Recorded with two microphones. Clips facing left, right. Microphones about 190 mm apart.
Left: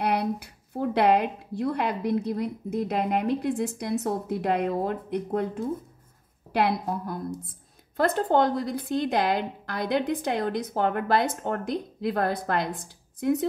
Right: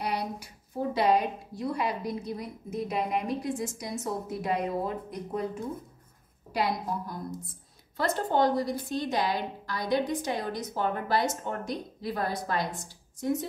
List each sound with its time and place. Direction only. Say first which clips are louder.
0.0 s a woman's voice: left 6 dB; 65° left (ahead or behind)